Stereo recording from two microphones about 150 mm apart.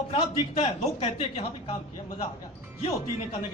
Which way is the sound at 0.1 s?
40° left (ahead or behind).